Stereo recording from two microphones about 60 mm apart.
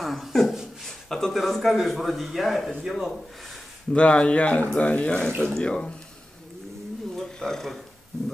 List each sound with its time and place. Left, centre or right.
0.0 s speech: centre
3.9 s a man's voice: centre
7.2 s a sound: centre